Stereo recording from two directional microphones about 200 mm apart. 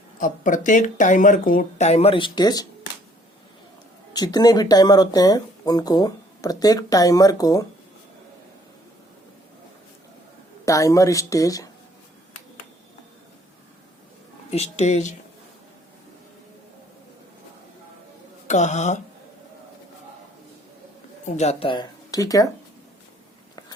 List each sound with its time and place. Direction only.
0.2 s speech: 40° left (ahead or behind); by 2.6 s 20° left (ahead or behind)
4.1 s speech: 20° left (ahead or behind)
10.7 s a woman's voice: 15° left (ahead or behind)
14.5 s speech: 35° left (ahead or behind)
18.4 s speech: 35° left (ahead or behind)
21.2 s speech: 35° left (ahead or behind); by 22.4 s 15° left (ahead or behind)